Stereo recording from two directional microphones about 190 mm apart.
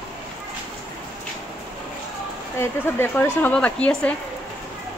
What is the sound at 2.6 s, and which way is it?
Speech, 10° left (ahead or behind).